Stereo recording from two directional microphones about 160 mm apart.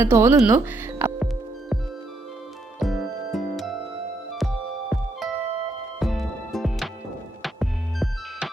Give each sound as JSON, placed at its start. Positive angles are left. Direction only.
{"t": 0.0, "sound": "speech", "side_deg": -15}
{"t": 1.2, "sound": "music", "side_deg": -5}